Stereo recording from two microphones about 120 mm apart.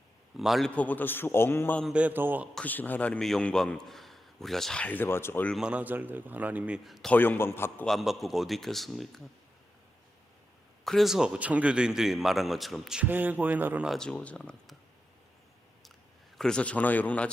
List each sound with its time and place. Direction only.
0.3 s a man's voice: centre (ahead or behind)
0.8 s a man's voice: 15° left (ahead or behind)
1.9 s a man's voice: 10° right (ahead or behind)
2.6 s a man's voice: 15° left (ahead or behind)
5.5 s a man's voice: 10° right (ahead or behind)
7.1 s a man's voice: 15° left (ahead or behind)
7.9 s a man's voice: centre (ahead or behind)
10.8 s a man's voice: centre (ahead or behind)
13.0 s a man's voice: 15° right (ahead or behind)
13.8 s a man's voice: 5° left (ahead or behind)
16.4 s a man's voice: 10° left (ahead or behind)